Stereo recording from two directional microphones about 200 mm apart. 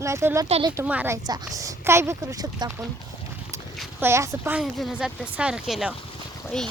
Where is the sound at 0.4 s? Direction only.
30° right (ahead or behind).